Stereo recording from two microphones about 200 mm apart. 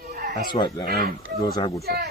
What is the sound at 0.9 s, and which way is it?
Speech, 50° right (ahead or behind).